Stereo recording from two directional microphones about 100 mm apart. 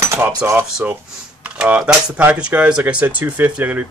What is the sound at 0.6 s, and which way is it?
Speech, 5° right (ahead or behind).